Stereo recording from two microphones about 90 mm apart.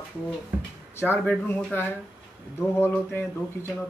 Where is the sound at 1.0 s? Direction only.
25° left (ahead or behind).